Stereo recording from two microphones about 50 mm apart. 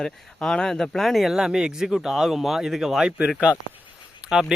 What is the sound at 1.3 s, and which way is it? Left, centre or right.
Speech, centre.